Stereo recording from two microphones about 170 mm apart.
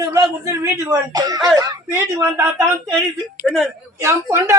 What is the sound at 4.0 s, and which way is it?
Speech, 15° right (ahead or behind).